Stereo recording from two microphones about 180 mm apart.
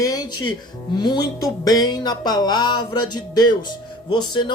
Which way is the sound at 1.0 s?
20° left (ahead or behind).